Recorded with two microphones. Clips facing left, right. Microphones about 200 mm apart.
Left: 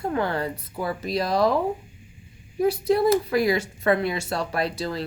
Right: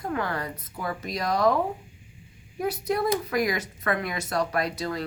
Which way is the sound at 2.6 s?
30° left (ahead or behind).